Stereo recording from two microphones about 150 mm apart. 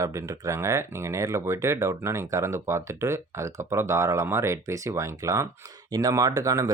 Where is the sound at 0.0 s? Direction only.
20° right (ahead or behind).